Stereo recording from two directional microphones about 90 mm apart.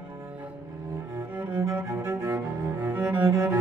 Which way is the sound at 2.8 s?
20° right (ahead or behind).